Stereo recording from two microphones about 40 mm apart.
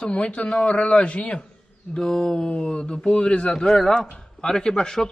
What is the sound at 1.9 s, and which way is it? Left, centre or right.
A man's voice, centre.